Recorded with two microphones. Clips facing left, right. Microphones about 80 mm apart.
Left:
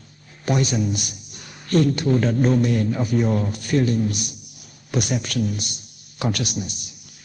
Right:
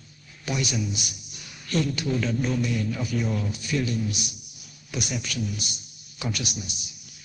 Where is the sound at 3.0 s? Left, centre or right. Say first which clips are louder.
Left 7 dB; left.